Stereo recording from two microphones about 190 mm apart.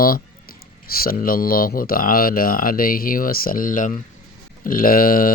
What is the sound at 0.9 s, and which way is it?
Speech, 50° left (ahead or behind).